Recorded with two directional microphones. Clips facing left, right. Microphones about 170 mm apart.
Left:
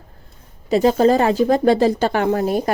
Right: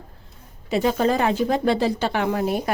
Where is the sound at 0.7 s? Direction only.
35° left (ahead or behind).